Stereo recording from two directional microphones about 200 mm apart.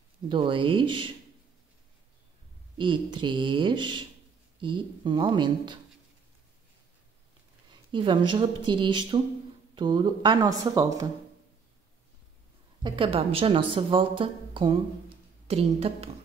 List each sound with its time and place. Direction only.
0.3 s a woman's voice: 25° right (ahead or behind)
2.8 s a woman's voice: 25° right (ahead or behind)
7.9 s a woman's voice: 25° right (ahead or behind)
12.8 s a woman's voice: 25° right (ahead or behind)